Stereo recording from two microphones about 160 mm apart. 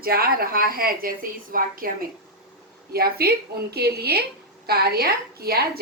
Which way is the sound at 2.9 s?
75° right (ahead or behind).